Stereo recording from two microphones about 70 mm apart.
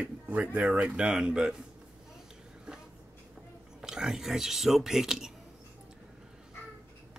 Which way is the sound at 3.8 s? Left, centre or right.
Centre.